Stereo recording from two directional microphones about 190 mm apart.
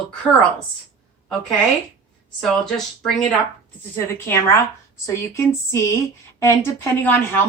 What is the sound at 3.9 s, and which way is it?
Speech, 15° left (ahead or behind).